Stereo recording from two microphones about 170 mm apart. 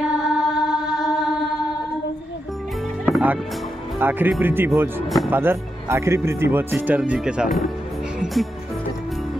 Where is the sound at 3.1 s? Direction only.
5° right (ahead or behind).